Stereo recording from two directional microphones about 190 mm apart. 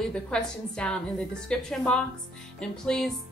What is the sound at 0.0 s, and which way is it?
Speech, 5° left (ahead or behind).